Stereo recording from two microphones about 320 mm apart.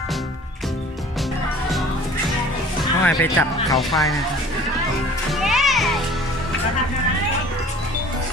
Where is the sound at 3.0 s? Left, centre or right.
Centre.